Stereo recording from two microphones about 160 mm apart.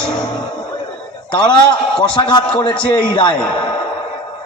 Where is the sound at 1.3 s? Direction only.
30° left (ahead or behind).